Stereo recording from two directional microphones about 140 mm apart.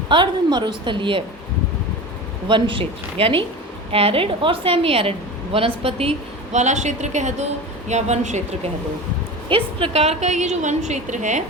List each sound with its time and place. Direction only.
0.1 s a woman's voice: 35° right (ahead or behind)
2.5 s a woman's voice: 35° right (ahead or behind); by 8.7 s 55° right (ahead or behind)
9.5 s a woman's voice: 40° right (ahead or behind); by 11.4 s 60° right (ahead or behind)